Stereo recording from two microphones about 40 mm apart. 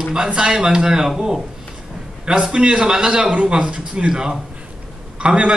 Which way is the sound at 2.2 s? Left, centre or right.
Right.